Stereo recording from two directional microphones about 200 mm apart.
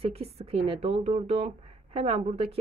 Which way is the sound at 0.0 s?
30° right (ahead or behind).